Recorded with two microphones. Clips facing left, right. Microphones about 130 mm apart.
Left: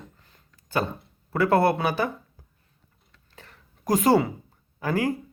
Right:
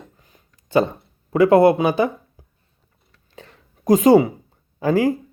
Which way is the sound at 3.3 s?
20° right (ahead or behind).